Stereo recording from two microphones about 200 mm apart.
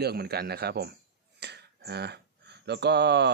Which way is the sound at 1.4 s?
55° right (ahead or behind).